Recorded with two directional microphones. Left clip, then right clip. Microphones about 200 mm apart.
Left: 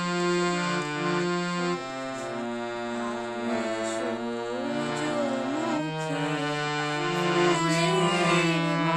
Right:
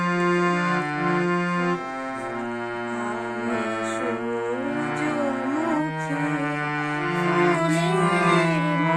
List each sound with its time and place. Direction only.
0.0 s music: 25° left (ahead or behind)
7.2 s music: 40° left (ahead or behind)